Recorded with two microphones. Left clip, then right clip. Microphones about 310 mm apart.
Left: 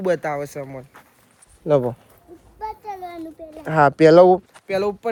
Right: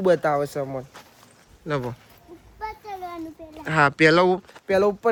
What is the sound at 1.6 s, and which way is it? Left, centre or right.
Speech, centre.